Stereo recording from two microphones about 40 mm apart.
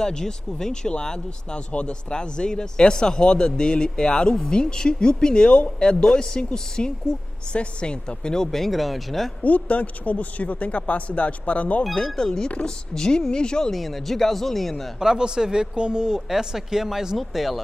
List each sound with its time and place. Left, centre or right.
0.0 s speech: centre
9.4 s speech: left
11.9 s speech: left
12.9 s speech: centre
13.7 s speech: centre
15.0 s speech: centre